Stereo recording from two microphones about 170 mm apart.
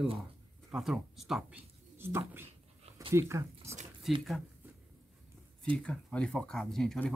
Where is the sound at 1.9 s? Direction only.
15° right (ahead or behind).